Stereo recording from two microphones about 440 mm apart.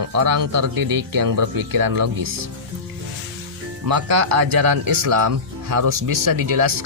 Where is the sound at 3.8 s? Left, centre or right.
Right.